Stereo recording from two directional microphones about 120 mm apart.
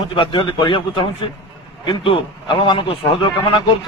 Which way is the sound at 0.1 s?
45° left (ahead or behind).